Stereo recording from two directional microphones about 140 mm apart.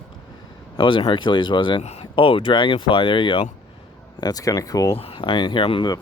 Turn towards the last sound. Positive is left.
turn(degrees=35)  # may be behind; listen again after turning